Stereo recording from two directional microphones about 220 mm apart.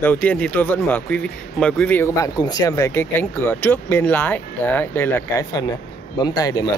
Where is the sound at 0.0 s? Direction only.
10° left (ahead or behind).